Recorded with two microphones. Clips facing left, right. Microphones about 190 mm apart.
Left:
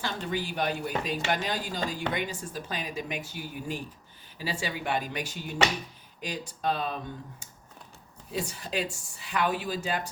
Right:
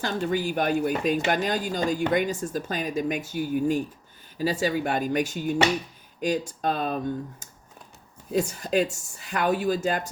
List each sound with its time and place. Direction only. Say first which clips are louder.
0.0 s speech: right 6 dB; 45° right (ahead or behind)